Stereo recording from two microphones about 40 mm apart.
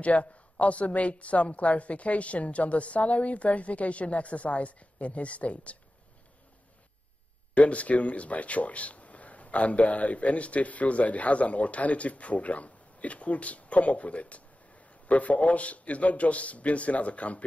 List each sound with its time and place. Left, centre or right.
0.0 s speech: left
7.5 s speech: left